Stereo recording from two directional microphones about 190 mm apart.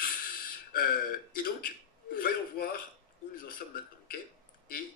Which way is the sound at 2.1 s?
50° left (ahead or behind).